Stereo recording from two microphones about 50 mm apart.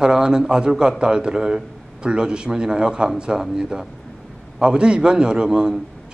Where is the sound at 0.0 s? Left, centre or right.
Centre.